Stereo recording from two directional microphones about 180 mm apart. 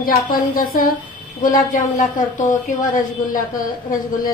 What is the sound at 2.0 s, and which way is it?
Speech, 45° left (ahead or behind).